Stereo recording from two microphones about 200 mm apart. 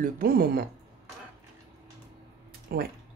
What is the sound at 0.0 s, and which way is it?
Speech, 45° right (ahead or behind).